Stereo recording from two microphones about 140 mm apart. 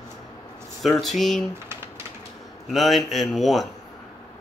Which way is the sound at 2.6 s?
Centre (ahead or behind).